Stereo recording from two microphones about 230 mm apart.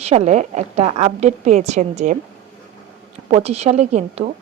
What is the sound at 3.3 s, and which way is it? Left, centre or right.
A woman's voice, right.